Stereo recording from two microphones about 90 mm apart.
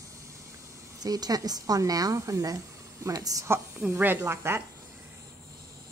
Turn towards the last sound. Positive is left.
turn(degrees=-25)  # may be behind; listen again after turning